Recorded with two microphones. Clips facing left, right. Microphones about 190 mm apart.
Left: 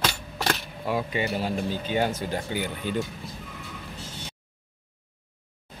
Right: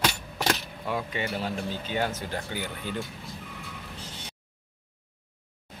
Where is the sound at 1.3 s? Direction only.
15° left (ahead or behind).